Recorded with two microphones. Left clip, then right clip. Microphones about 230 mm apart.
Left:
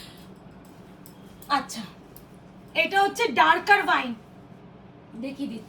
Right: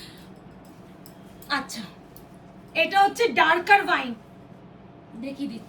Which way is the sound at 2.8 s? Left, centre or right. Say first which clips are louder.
Right 3 dB; left.